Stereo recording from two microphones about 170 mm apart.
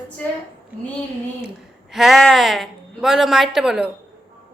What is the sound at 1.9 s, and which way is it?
Speech, centre (ahead or behind).